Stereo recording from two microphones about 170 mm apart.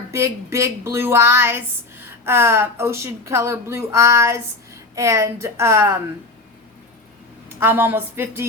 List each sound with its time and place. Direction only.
0.1 s speech: 15° right (ahead or behind)
7.6 s speech: 10° right (ahead or behind)